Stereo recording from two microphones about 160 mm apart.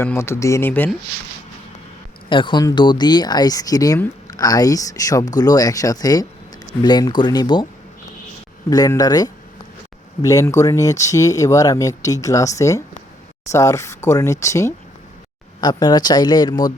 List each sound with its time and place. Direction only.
0.0 s speech: 15° left (ahead or behind)
2.3 s speech: 30° left (ahead or behind)
8.7 s speech: 25° left (ahead or behind)